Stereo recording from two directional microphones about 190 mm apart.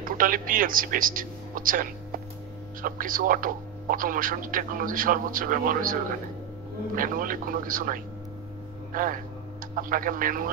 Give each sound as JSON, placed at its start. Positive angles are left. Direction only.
{"t": 0.0, "sound": "speech", "side_deg": -45}
{"t": 7.0, "sound": "speech", "side_deg": -45}